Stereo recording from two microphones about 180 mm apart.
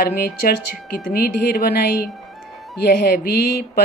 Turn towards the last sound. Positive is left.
turn(degrees=65)  # may be behind; listen again after turning